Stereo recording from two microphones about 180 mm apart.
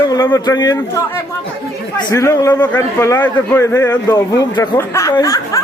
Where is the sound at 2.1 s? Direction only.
15° left (ahead or behind).